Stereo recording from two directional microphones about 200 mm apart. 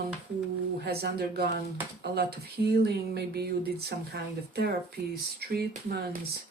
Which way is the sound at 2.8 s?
55° right (ahead or behind).